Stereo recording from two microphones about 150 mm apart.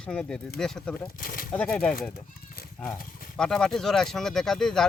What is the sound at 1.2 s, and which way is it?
Speech, 70° left (ahead or behind).